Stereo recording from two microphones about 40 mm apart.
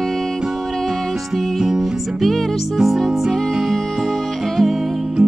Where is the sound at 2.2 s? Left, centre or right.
Centre.